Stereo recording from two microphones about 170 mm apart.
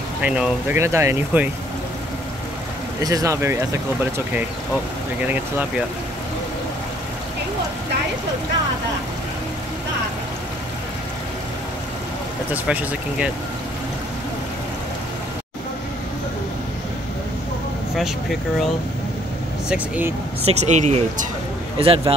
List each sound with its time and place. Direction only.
0.2 s speech: 5° right (ahead or behind)
3.0 s speech: 20° right (ahead or behind)
5.2 s speech: 10° right (ahead or behind)
12.6 s speech: 5° right (ahead or behind)
17.9 s speech: centre (ahead or behind)
20.4 s speech: 40° right (ahead or behind)
21.7 s speech: 35° right (ahead or behind)